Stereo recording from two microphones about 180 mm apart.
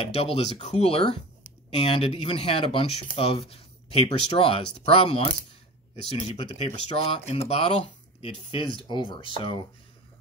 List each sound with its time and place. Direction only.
0.0 s speech: 35° left (ahead or behind)